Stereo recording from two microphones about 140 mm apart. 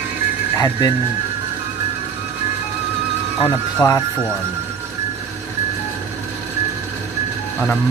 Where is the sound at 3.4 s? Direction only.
30° left (ahead or behind).